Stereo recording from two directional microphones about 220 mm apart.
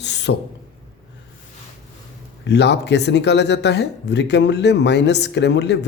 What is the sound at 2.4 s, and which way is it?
Speech, 50° left (ahead or behind).